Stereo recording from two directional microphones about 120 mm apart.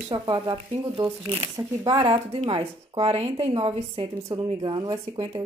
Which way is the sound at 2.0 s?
50° right (ahead or behind).